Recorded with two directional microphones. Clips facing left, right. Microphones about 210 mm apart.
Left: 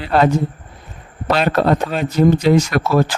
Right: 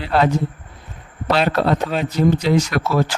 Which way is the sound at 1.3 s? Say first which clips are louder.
Left 2 dB; 45° left (ahead or behind).